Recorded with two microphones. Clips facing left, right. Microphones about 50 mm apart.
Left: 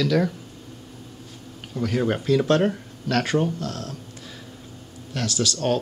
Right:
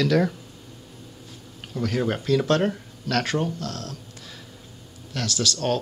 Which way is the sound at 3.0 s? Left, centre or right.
Centre.